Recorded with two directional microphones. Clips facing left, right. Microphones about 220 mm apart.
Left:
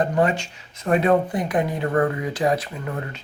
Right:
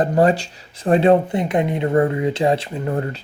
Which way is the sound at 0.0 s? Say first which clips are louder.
Right 5 dB; 35° right (ahead or behind).